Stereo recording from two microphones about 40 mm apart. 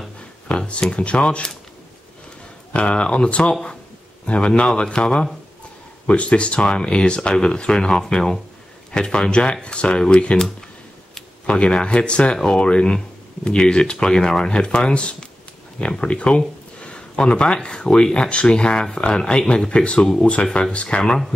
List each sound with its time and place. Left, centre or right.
0.5 s speech: left
2.7 s speech: left
6.0 s speech: left
11.4 s speech: left
19.7 s speech: left